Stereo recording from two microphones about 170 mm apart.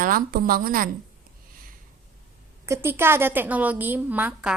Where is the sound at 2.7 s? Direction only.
15° right (ahead or behind).